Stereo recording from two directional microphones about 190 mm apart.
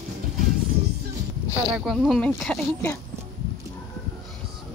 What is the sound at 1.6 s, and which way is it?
Speech, 5° right (ahead or behind).